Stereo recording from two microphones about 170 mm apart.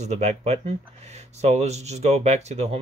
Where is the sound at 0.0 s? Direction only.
40° right (ahead or behind).